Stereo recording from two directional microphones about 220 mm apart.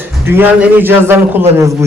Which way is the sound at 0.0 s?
10° right (ahead or behind).